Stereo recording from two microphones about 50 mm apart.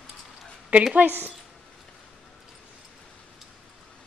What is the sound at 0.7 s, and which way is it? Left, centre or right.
Speech, right.